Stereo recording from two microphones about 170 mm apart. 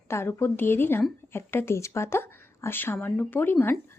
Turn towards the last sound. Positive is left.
turn(degrees=15)  # may be behind; listen again after turning